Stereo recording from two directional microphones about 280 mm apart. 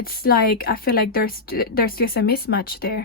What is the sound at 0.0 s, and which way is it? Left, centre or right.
Speech, left.